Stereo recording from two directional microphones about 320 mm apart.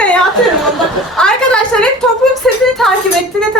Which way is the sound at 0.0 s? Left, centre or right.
Centre.